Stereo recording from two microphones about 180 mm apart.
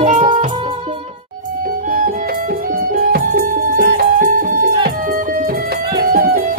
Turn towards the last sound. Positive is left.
turn(degrees=-55)  # may be behind; listen again after turning